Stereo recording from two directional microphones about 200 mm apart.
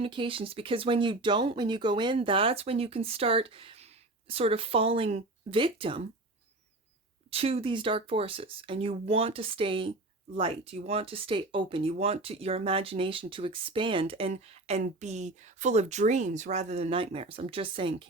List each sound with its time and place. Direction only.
0.0 s speech: 25° right (ahead or behind)
7.3 s speech: 30° right (ahead or behind)